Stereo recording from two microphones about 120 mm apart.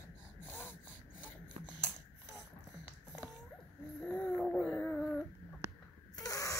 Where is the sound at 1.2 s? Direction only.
15° left (ahead or behind).